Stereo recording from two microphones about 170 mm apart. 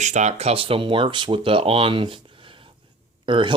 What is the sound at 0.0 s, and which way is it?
Speech, 45° right (ahead or behind).